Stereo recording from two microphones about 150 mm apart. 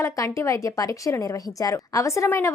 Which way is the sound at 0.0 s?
20° left (ahead or behind).